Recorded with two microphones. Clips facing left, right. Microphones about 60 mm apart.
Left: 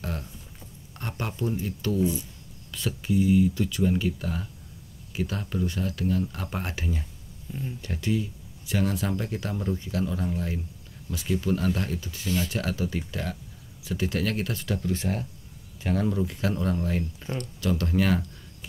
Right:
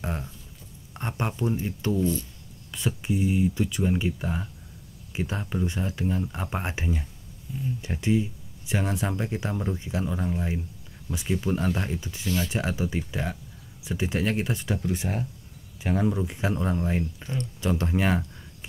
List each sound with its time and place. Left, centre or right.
0.0 s a sound: right
0.9 s speech: right
2.0 s speech: centre
2.9 s speech: centre